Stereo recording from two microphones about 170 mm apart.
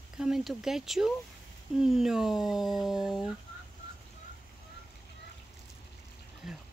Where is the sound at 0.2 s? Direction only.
Centre (ahead or behind).